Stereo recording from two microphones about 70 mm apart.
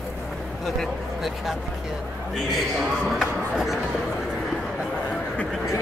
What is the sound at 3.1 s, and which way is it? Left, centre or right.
Speech, centre.